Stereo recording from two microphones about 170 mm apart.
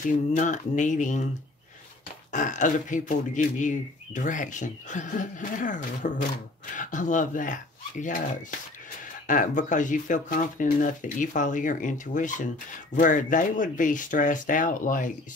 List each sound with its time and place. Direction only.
0.0 s speech: 45° left (ahead or behind)
2.3 s speech: 45° left (ahead or behind)